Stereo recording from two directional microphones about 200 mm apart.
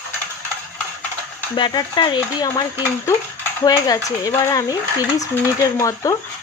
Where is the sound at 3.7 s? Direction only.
20° left (ahead or behind).